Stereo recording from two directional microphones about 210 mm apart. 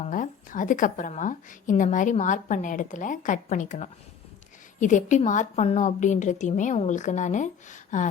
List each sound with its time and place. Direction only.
0.0 s a woman's voice: 40° left (ahead or behind)